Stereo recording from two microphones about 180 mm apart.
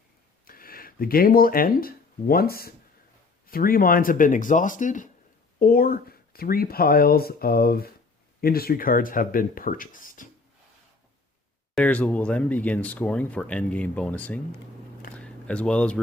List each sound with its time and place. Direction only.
0.4 s speech: 55° left (ahead or behind)
11.7 s speech: 10° left (ahead or behind)
15.2 s a sound: 5° left (ahead or behind)